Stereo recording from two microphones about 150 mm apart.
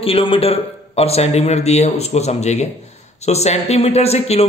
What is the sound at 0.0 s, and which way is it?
Speech, 40° left (ahead or behind).